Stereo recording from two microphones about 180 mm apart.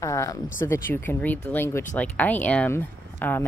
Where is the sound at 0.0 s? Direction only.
15° left (ahead or behind).